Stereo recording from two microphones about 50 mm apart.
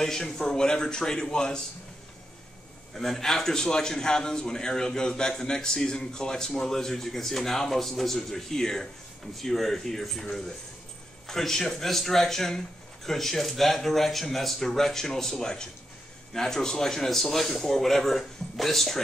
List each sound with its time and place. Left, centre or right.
0.0 s a man's voice: centre
2.9 s a man's voice: centre
11.2 s a man's voice: centre